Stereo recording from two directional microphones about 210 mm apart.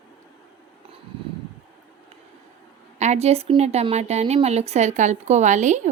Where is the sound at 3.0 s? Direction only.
30° right (ahead or behind).